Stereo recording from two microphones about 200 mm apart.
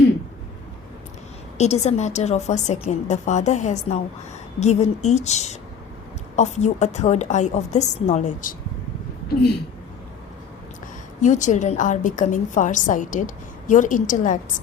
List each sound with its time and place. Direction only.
1.5 s a woman's voice: 35° left (ahead or behind)
11.2 s a woman's voice: 40° left (ahead or behind)